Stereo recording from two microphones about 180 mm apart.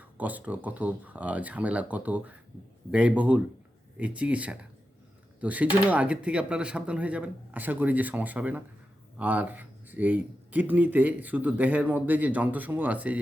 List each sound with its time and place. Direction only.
0.0 s speech: 10° right (ahead or behind)